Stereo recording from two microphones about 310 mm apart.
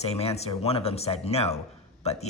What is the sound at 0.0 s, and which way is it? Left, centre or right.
Speech, centre.